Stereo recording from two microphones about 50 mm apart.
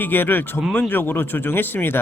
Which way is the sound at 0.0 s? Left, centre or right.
Left.